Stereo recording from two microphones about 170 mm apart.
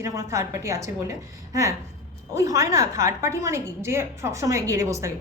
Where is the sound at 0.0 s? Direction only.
20° right (ahead or behind).